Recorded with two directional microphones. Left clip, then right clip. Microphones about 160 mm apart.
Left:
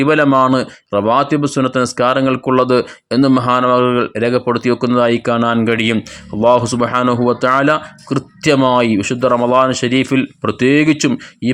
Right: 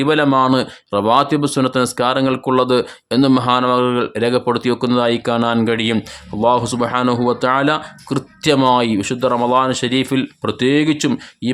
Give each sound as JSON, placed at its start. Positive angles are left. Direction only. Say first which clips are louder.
{"t": 0.0, "sound": "speech", "louder": "left 3 dB", "side_deg": 15}